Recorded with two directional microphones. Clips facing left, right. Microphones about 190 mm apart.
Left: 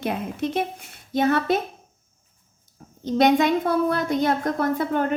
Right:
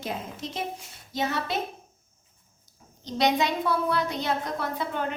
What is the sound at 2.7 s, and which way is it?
A woman's voice, 50° left (ahead or behind).